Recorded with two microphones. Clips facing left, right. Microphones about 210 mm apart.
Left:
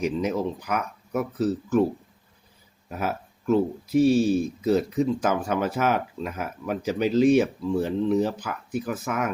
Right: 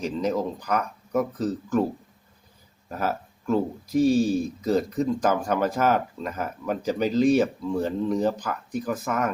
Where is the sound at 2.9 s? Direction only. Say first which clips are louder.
Right 1 dB; 5° left (ahead or behind).